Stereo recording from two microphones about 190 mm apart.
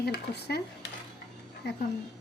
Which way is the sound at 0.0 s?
60° left (ahead or behind).